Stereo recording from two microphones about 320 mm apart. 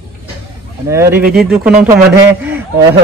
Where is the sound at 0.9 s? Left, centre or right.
Centre.